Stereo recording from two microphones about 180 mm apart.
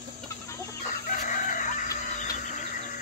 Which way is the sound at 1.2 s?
45° left (ahead or behind).